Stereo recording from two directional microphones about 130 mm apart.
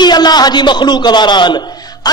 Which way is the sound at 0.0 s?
35° left (ahead or behind).